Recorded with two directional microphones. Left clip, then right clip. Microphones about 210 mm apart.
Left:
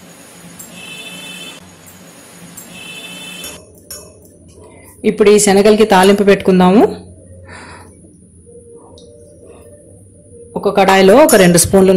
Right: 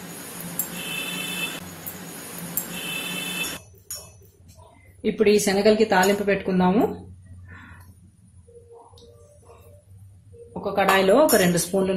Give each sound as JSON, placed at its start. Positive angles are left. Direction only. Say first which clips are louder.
{"t": 5.0, "sound": "speech", "louder": "left 10 dB", "side_deg": 30}
{"t": 10.6, "sound": "speech", "louder": "left 10 dB", "side_deg": 45}